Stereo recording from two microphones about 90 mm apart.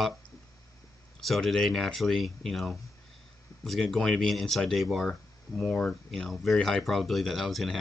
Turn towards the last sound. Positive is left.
turn(degrees=0)  # may be behind; listen again after turning